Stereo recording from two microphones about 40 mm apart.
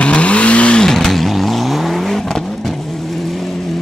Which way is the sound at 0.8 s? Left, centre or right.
Centre.